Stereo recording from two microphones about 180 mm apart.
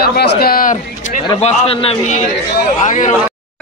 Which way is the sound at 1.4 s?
30° left (ahead or behind).